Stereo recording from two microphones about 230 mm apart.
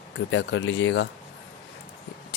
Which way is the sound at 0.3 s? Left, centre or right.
Left.